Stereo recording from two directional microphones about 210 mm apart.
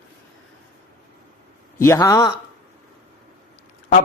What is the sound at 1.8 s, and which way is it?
Speech, 15° left (ahead or behind).